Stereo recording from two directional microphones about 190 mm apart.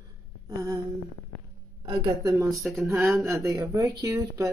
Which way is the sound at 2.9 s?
15° right (ahead or behind).